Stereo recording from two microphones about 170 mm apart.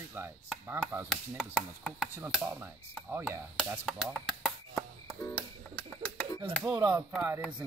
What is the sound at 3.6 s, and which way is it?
Speech, centre (ahead or behind).